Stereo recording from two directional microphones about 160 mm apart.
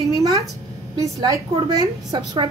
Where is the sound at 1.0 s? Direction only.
25° right (ahead or behind).